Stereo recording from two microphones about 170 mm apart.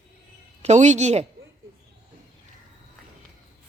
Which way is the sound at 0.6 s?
40° right (ahead or behind).